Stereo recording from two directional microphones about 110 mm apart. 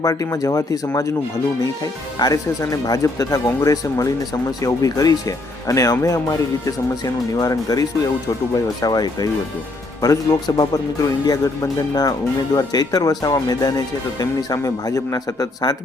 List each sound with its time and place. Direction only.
0.0 s speech: 30° left (ahead or behind)